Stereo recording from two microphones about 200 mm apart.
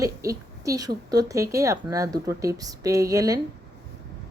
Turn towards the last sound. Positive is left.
turn(degrees=-15)  # may be behind; listen again after turning